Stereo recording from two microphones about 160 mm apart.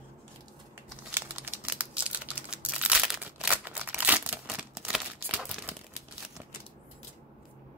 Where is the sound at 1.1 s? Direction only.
10° right (ahead or behind).